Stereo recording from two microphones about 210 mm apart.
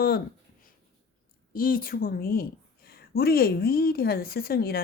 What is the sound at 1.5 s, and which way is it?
A woman's voice, 45° left (ahead or behind).